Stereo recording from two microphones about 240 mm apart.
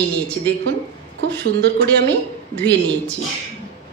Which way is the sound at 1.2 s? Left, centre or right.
Right.